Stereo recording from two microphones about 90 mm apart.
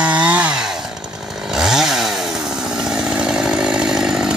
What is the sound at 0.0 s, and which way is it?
Chainsaw, 15° right (ahead or behind).